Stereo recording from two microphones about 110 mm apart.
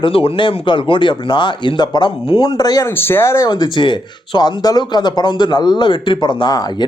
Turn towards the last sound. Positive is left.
turn(degrees=40)  # may be behind; listen again after turning